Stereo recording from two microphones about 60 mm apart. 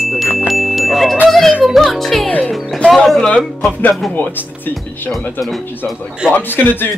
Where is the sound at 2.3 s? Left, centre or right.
Left.